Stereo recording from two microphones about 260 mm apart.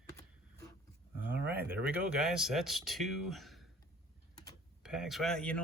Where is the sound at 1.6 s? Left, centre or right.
Centre.